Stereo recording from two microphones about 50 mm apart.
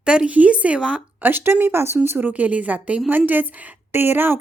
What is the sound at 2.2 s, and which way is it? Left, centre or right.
A woman's voice, right.